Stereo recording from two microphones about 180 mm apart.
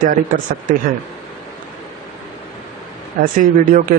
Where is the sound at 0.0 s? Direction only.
50° right (ahead or behind).